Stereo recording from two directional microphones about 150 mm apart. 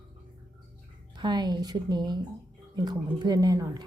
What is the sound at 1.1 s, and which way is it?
A woman's voice, 30° right (ahead or behind).